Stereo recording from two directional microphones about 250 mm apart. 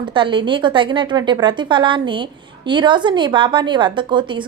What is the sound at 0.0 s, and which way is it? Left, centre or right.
A woman's voice, centre.